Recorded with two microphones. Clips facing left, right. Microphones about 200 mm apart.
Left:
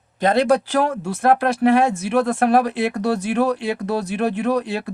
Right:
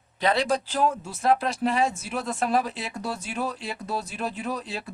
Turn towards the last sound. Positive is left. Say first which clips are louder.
# left 11 dB
turn(degrees=65)  # may be behind; listen again after turning